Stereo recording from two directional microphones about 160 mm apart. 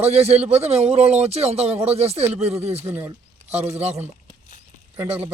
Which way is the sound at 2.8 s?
15° right (ahead or behind).